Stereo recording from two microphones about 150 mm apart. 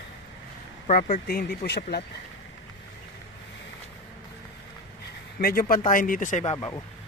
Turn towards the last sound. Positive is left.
turn(degrees=55)  # may be behind; listen again after turning